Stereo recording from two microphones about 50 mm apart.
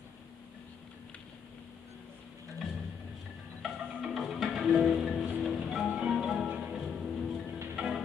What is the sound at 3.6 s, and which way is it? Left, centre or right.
Music, centre.